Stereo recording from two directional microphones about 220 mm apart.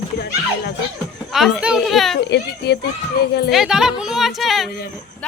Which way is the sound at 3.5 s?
Centre (ahead or behind).